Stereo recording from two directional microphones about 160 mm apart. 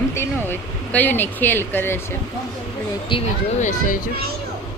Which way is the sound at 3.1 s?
30° left (ahead or behind).